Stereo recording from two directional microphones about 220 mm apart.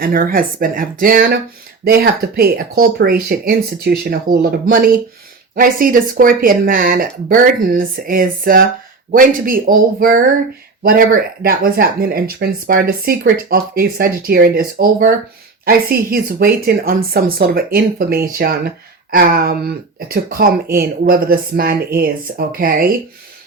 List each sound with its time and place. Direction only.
0.0 s speech: 40° right (ahead or behind)